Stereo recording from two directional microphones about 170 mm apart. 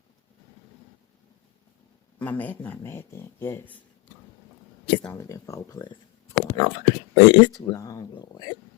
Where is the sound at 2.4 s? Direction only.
10° left (ahead or behind).